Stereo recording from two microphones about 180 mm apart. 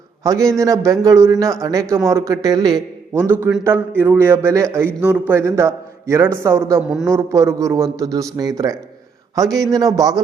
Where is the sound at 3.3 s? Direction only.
10° right (ahead or behind).